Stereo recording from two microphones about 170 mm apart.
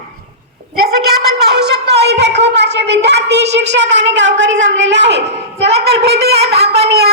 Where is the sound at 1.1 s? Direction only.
75° right (ahead or behind).